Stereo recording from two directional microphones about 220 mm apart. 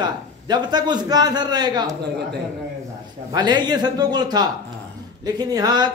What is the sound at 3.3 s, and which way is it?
A man's voice, 20° right (ahead or behind).